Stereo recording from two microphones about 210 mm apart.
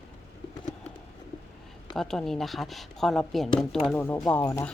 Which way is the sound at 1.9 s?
Centre (ahead or behind).